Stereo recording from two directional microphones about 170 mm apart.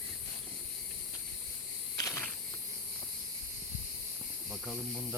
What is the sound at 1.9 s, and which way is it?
Cricket, 15° left (ahead or behind).